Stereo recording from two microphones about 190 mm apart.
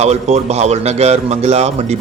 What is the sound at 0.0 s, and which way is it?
A man's voice, 35° right (ahead or behind).